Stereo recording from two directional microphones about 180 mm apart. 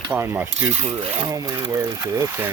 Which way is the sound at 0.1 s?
10° right (ahead or behind).